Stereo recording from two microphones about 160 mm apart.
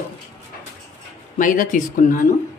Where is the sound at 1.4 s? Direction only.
55° left (ahead or behind).